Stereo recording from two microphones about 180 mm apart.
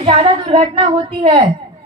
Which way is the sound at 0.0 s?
30° right (ahead or behind).